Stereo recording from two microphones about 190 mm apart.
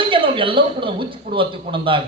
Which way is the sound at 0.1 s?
25° right (ahead or behind).